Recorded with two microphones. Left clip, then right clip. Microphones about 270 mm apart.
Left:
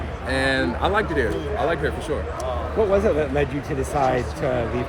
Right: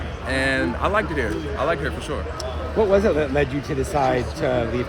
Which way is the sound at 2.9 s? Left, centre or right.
Right.